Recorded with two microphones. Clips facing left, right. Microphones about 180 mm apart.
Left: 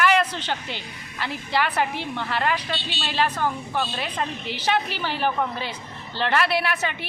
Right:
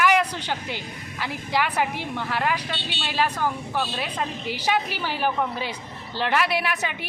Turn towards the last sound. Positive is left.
turn(degrees=-15)  # may be behind; listen again after turning